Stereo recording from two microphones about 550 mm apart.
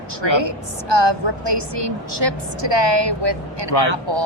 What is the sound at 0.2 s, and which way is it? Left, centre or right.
A woman's voice, right.